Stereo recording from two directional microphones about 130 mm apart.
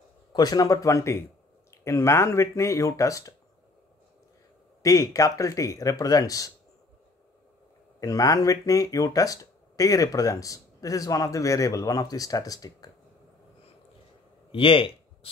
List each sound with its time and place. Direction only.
0.3 s speech: 30° left (ahead or behind)
4.8 s speech: 25° left (ahead or behind)
8.0 s speech: 25° left (ahead or behind)
14.5 s speech: 45° left (ahead or behind)